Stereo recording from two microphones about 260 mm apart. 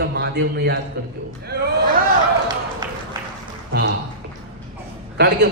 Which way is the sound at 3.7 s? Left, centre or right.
Right.